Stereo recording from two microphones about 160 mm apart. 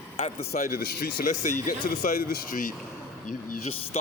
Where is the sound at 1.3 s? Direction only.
50° left (ahead or behind).